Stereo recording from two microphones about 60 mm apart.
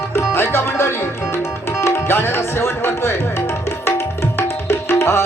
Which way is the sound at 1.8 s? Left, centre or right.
Left.